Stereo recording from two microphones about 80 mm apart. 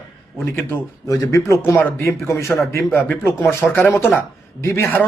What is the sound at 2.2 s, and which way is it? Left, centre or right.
Speech, left.